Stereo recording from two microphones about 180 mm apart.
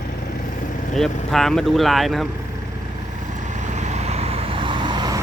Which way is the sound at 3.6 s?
40° right (ahead or behind).